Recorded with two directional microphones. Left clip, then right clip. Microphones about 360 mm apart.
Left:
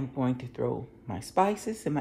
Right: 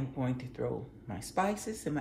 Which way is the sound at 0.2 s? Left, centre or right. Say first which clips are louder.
Left 6 dB; centre.